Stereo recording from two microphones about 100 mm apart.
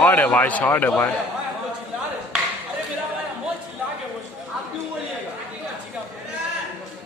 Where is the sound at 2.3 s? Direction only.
10° right (ahead or behind).